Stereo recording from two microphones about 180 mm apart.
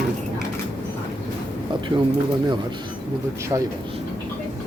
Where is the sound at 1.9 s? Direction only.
25° right (ahead or behind).